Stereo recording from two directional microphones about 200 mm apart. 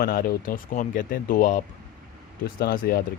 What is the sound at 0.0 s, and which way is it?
Speech, 45° left (ahead or behind).